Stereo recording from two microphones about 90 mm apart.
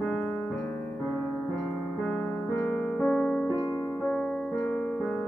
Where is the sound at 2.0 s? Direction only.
5° left (ahead or behind).